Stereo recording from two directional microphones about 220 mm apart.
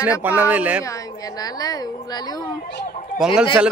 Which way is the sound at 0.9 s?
15° left (ahead or behind).